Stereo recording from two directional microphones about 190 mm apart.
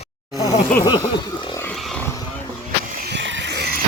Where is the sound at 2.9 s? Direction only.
60° right (ahead or behind).